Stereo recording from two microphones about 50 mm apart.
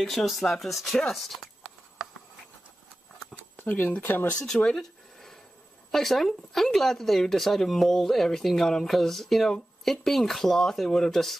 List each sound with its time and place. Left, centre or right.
0.0 s speech: centre
3.5 s speech: left
4.6 s a sound: centre
5.9 s speech: centre